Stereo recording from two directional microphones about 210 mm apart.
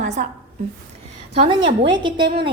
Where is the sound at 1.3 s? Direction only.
25° right (ahead or behind).